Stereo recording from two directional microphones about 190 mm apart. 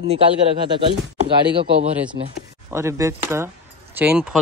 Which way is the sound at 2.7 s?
15° right (ahead or behind).